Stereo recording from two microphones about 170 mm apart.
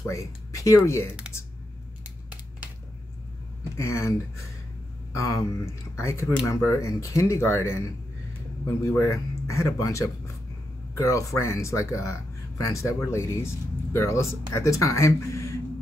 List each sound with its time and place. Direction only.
0.0 s speech: 20° left (ahead or behind)
3.7 s speech: 15° left (ahead or behind)
5.1 s speech: 20° left (ahead or behind)